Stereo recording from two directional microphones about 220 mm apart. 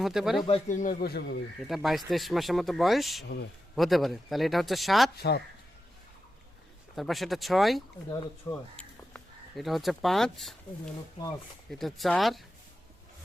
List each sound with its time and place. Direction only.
0.0 s speech: centre (ahead or behind)
0.4 s a man's voice: 30° left (ahead or behind); by 1.4 s 45° left (ahead or behind)
1.5 s speech: centre (ahead or behind)
5.1 s speech: 45° left (ahead or behind)
6.9 s speech: centre (ahead or behind)
8.1 s speech: 20° left (ahead or behind)
8.7 s speech: 5° left (ahead or behind)
11.7 s speech: centre (ahead or behind)